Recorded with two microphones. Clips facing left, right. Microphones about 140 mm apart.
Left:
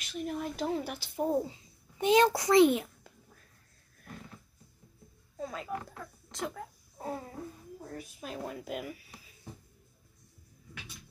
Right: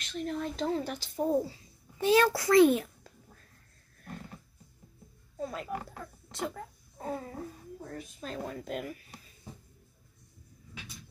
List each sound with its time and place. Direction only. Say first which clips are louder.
0.0 s a child's voice: right 1 dB; 5° left (ahead or behind)
5.4 s a child's voice: right 1 dB; centre (ahead or behind)